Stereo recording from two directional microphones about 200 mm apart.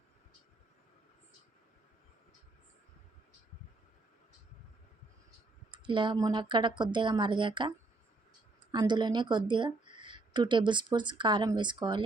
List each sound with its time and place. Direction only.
5.7 s a woman's voice: 25° right (ahead or behind)
8.7 s a woman's voice: 20° right (ahead or behind)